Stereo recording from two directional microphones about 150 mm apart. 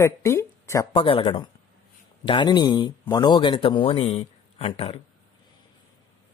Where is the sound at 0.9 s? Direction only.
35° left (ahead or behind).